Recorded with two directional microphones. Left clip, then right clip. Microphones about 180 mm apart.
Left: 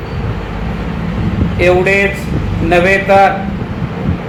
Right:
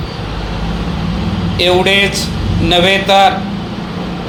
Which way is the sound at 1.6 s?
35° right (ahead or behind).